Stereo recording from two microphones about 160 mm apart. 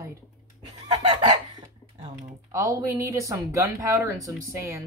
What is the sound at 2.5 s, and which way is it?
Speech, 20° right (ahead or behind).